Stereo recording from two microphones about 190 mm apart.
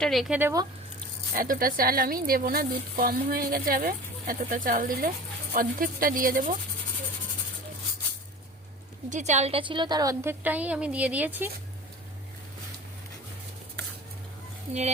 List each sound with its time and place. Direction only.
0.0 s speech: centre (ahead or behind)
0.3 s a woman's voice: 10° right (ahead or behind)
1.3 s speech: 45° right (ahead or behind)
9.0 s a woman's voice: 40° right (ahead or behind); by 11.5 s 10° right (ahead or behind)